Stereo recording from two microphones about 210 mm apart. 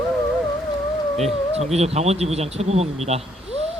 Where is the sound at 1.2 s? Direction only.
30° right (ahead or behind).